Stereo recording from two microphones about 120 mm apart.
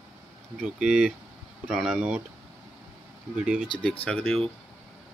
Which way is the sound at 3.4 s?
5° right (ahead or behind).